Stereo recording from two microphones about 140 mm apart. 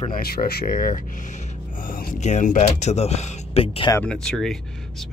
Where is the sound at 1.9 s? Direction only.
85° left.